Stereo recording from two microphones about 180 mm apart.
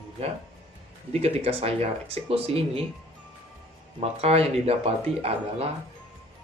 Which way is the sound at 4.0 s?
35° right (ahead or behind).